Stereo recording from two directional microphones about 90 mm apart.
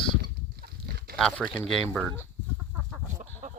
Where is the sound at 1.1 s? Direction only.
5° left (ahead or behind).